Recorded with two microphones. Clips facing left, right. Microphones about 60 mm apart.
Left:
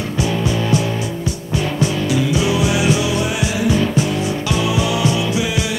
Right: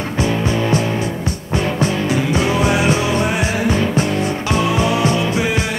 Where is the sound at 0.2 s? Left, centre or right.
Right.